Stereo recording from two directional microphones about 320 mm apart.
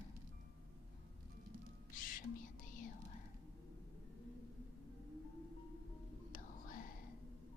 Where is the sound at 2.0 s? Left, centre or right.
Left.